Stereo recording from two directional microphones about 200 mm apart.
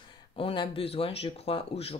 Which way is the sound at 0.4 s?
25° left (ahead or behind).